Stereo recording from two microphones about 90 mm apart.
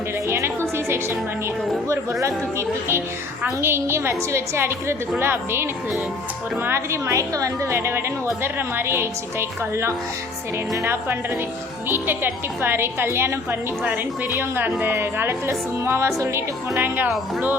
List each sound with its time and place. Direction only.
0.3 s music: 30° right (ahead or behind)
2.2 s a woman's voice: 30° right (ahead or behind)
11.9 s a woman's voice: 25° right (ahead or behind)
16.7 s a woman's voice: 20° right (ahead or behind)